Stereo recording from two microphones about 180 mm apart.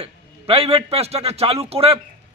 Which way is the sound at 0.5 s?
35° right (ahead or behind).